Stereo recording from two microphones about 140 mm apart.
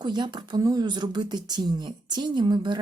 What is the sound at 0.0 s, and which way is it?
A woman's voice, 35° right (ahead or behind).